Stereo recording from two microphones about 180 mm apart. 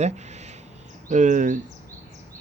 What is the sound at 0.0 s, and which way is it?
A man's voice, 40° right (ahead or behind).